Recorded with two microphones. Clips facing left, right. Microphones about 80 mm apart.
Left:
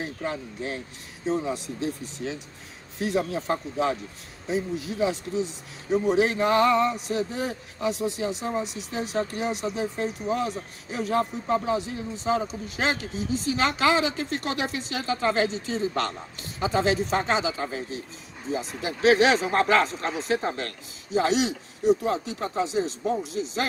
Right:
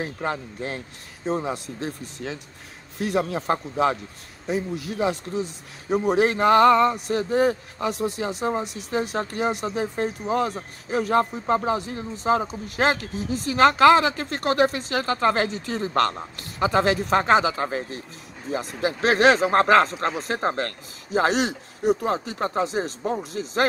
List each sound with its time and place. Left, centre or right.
0.0 s a man's voice: right